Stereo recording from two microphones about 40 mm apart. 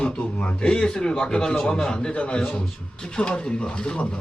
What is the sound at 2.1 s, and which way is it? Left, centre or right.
A man's voice, left.